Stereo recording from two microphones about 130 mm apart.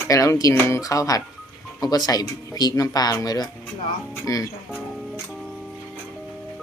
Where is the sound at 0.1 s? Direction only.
25° left (ahead or behind).